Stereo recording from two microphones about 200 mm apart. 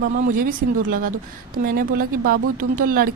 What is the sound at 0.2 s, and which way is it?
Speech, 40° right (ahead or behind).